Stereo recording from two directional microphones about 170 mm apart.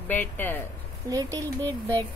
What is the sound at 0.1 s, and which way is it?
Speech, 10° left (ahead or behind).